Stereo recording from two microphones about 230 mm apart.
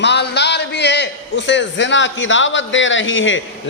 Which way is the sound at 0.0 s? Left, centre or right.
Left.